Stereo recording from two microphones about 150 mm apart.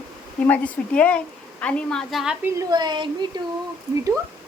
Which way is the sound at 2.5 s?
30° right (ahead or behind).